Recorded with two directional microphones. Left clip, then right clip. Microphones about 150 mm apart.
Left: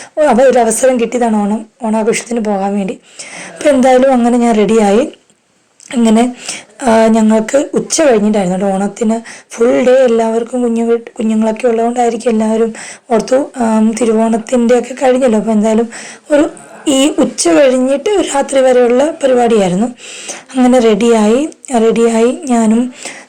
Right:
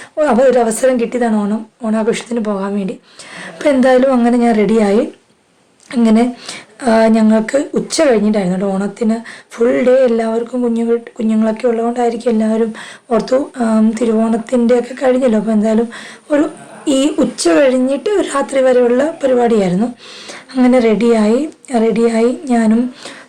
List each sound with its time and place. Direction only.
0.2 s speech: 10° left (ahead or behind)